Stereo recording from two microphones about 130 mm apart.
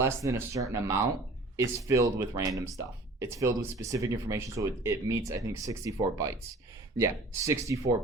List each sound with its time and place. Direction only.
0.0 s speech: 25° right (ahead or behind)